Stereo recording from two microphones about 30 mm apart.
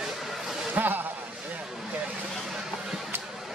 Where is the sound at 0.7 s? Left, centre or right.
Right.